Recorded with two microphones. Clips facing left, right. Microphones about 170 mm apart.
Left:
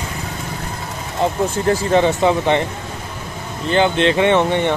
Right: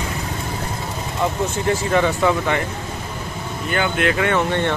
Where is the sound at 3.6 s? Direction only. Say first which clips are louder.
Left 5 dB; 25° left (ahead or behind).